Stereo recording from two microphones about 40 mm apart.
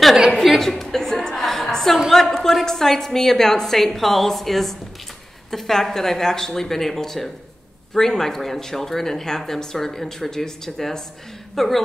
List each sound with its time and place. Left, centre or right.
0.6 s chuckle: centre
2.0 s a woman's voice: centre